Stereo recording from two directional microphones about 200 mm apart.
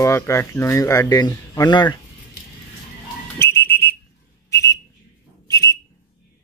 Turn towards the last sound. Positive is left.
turn(degrees=15)  # may be behind; listen again after turning